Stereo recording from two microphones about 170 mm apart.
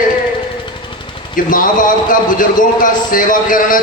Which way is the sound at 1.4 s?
55° left (ahead or behind).